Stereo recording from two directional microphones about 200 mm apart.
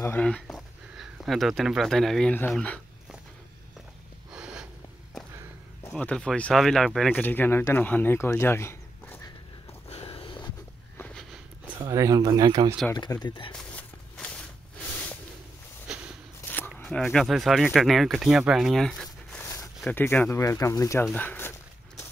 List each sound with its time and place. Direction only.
0.0 s speech: 10° left (ahead or behind)
4.3 s a sound: 5° right (ahead or behind)
5.9 s speech: 5° left (ahead or behind)
9.8 s a sound: 30° left (ahead or behind)
11.8 s speech: 15° right (ahead or behind)
12.9 s speech: 20° left (ahead or behind)
13.6 s walk: 5° left (ahead or behind)
15.9 s walk: 5° right (ahead or behind)
16.4 s speech: 10° left (ahead or behind)